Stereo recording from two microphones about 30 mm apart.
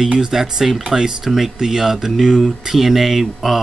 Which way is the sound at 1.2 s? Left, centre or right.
Centre.